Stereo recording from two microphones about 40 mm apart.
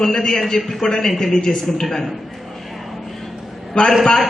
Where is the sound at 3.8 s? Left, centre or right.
Left.